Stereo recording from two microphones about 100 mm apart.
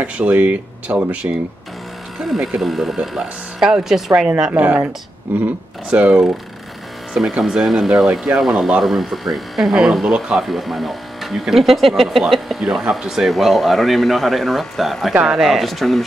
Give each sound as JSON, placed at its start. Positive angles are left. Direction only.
{"t": 0.0, "sound": "speech", "side_deg": -15}
{"t": 2.1, "sound": "speech", "side_deg": -5}
{"t": 7.2, "sound": "speech", "side_deg": -5}